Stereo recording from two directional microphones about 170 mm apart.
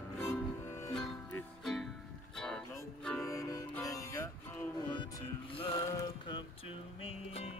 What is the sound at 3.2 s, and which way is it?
Music, 20° left (ahead or behind).